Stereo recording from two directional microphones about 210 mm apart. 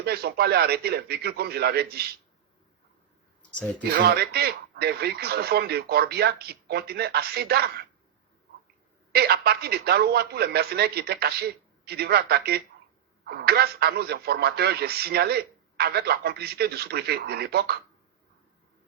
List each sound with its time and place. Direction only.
0.0 s speech: 50° right (ahead or behind)
3.9 s speech: 50° right (ahead or behind)
9.1 s speech: 50° right (ahead or behind)